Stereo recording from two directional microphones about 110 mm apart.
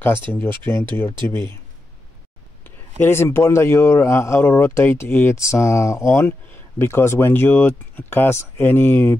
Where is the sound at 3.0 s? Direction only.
25° left (ahead or behind).